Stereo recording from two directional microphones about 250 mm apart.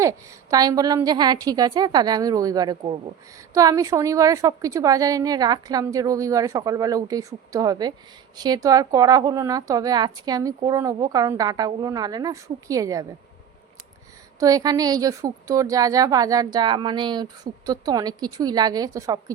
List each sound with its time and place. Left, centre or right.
0.0 s a woman's voice: centre
14.3 s a woman's voice: centre